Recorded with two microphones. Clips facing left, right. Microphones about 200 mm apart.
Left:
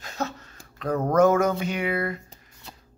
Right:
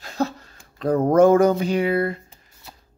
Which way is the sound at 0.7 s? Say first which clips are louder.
Right 5 dB; 30° right (ahead or behind).